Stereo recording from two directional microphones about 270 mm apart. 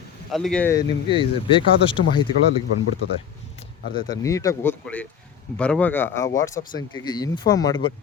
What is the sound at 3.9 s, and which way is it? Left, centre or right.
Speech, centre.